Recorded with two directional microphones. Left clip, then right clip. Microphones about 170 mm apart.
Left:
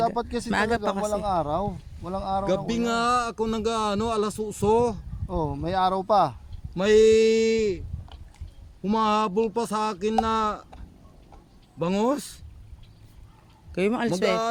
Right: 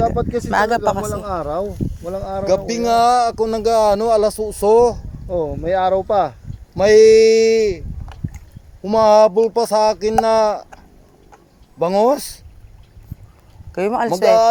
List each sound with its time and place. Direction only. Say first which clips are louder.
0.2 s speech: right 8 dB; 55° left (ahead or behind)
0.5 s speech: right 8 dB; 10° left (ahead or behind)
1.2 s speech: right 3 dB; 45° left (ahead or behind)
3.0 s speech: right 11 dB; 20° left (ahead or behind)
5.3 s speech: right 9 dB; 55° left (ahead or behind)
6.7 s speech: right 9 dB; 20° left (ahead or behind)
11.8 s speech: right 10 dB; 20° left (ahead or behind)
13.7 s speech: right 7 dB; 15° left (ahead or behind)